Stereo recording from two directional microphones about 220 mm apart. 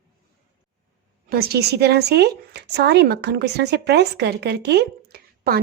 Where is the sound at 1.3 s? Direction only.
45° right (ahead or behind).